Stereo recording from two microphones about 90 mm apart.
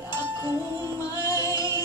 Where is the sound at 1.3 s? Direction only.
40° left (ahead or behind).